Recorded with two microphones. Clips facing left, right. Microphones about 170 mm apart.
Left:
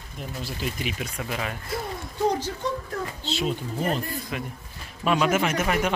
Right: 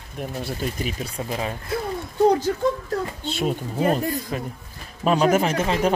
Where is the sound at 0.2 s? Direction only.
55° right (ahead or behind).